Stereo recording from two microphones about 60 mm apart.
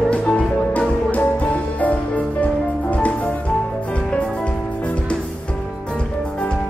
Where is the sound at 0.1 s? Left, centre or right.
Centre.